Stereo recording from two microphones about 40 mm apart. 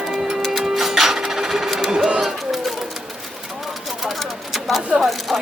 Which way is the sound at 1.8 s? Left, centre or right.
Centre.